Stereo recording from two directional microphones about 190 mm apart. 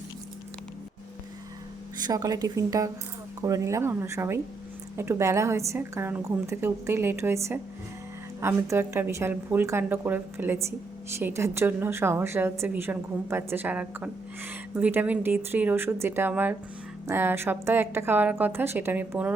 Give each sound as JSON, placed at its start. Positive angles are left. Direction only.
{"t": 2.0, "sound": "a woman's voice", "side_deg": -20}